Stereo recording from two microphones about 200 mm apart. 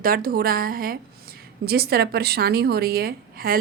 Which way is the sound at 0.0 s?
50° right (ahead or behind).